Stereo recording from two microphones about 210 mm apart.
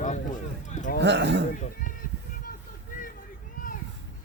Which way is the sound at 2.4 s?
40° left (ahead or behind).